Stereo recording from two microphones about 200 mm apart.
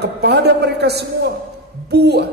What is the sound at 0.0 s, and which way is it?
A man's voice, 55° right (ahead or behind).